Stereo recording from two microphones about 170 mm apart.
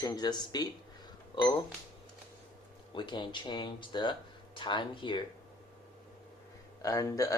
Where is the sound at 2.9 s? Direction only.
30° left (ahead or behind).